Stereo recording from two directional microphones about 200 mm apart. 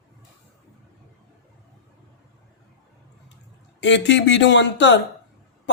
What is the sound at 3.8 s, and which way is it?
Speech, 60° left (ahead or behind).